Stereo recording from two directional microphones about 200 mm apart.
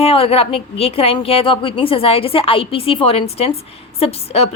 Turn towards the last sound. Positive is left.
turn(degrees=30)  # may be behind; listen again after turning